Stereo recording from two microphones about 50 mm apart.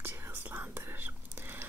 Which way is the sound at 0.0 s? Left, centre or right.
Right.